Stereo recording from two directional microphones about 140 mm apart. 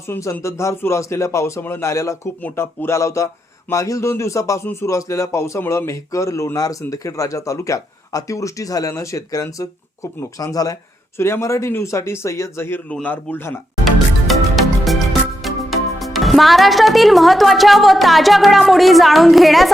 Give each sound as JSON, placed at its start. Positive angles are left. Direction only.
{"t": 0.1, "sound": "a man's voice", "side_deg": 20}
{"t": 13.8, "sound": "music", "side_deg": 0}
{"t": 15.4, "sound": "speech", "side_deg": 0}